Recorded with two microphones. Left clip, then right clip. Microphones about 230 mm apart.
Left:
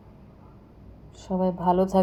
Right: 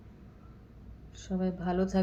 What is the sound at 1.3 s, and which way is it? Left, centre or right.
Speech, left.